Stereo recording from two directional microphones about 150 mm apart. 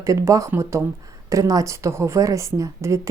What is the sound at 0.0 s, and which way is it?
Speech, 20° right (ahead or behind).